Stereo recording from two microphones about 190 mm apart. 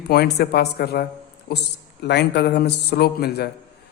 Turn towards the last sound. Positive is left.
turn(degrees=55)  # may be behind; listen again after turning